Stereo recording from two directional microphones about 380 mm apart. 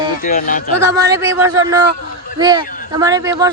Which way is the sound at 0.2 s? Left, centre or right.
Left.